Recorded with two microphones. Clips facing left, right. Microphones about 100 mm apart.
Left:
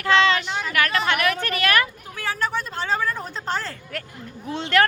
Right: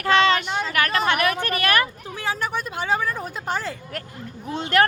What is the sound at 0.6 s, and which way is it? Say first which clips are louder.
A woman's voice: right 1 dB; 40° right (ahead or behind).